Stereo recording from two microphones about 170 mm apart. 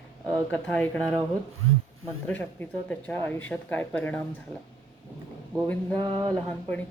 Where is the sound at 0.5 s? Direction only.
10° left (ahead or behind).